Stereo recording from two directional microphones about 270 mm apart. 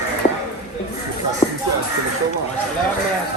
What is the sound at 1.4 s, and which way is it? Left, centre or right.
Speech, left.